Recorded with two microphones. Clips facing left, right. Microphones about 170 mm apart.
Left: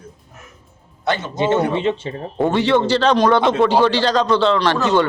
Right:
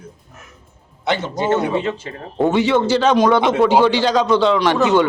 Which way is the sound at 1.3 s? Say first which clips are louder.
Left 1 dB; 20° left (ahead or behind).